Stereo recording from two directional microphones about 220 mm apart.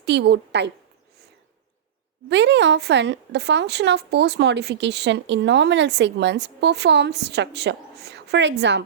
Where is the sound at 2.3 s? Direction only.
55° right (ahead or behind).